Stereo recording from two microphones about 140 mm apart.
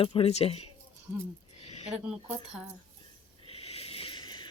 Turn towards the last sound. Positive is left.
turn(degrees=35)  # may be behind; listen again after turning